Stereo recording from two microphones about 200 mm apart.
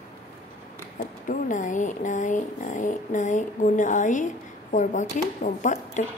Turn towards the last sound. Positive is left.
turn(degrees=40)  # may be behind; listen again after turning